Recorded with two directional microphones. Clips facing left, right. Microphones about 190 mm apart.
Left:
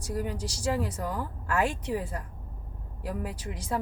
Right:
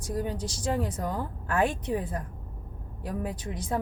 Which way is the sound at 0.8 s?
25° right (ahead or behind).